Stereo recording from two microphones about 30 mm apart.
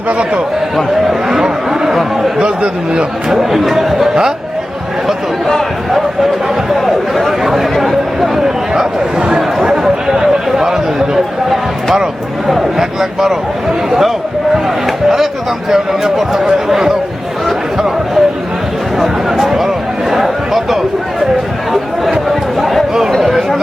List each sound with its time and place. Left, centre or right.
1.3 s speech: centre
2.4 s a man's voice: right
3.2 s speech: centre
6.7 s chatter: centre
10.2 s a sound: centre
12.5 s speech: centre
15.7 s speech: centre
17.7 s a sound: centre